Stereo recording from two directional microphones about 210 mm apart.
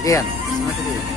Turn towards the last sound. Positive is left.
turn(degrees=15)  # may be behind; listen again after turning